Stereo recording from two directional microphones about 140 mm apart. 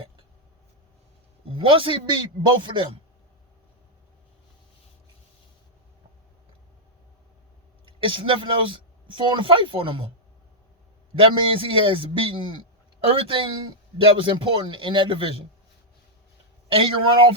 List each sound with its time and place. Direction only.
1.5 s a man's voice: 40° right (ahead or behind)
7.9 s speech: 40° right (ahead or behind)
11.1 s a man's voice: 40° right (ahead or behind)
16.7 s a man's voice: 40° right (ahead or behind)